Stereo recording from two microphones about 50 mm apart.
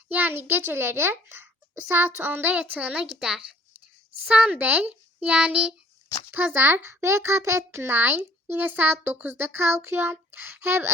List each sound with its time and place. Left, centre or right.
0.1 s a child's voice: right
2.6 s a child's voice: right
3.0 s a child's voice: centre
4.3 s a child's voice: right
4.6 s a child's voice: right
6.3 s a child's voice: right
7.0 s a child's voice: right